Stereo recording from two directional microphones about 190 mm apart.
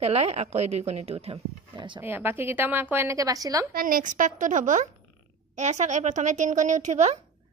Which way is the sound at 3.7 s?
45° right (ahead or behind).